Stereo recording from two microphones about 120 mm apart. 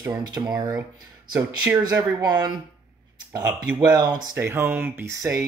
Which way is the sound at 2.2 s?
35° right (ahead or behind).